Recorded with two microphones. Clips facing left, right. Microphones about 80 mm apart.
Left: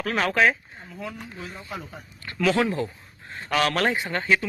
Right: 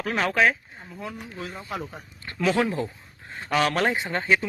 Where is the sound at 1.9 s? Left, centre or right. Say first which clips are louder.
Even; centre.